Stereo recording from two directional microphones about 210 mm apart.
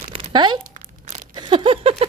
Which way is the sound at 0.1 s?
25° right (ahead or behind).